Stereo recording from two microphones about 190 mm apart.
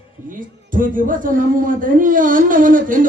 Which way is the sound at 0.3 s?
45° right (ahead or behind).